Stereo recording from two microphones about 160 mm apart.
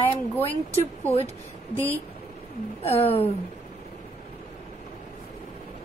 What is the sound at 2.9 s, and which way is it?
Speech, 40° left (ahead or behind).